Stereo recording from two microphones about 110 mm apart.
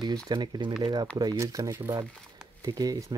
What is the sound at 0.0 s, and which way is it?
Speech, 40° right (ahead or behind).